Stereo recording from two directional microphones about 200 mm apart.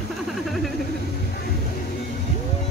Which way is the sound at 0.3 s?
Centre (ahead or behind).